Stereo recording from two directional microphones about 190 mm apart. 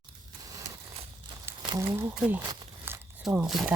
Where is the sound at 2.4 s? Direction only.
20° right (ahead or behind).